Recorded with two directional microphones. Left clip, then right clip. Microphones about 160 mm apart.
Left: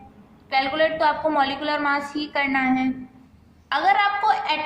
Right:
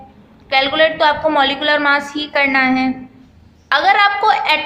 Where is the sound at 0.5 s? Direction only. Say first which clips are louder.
Right 7 dB; 15° right (ahead or behind).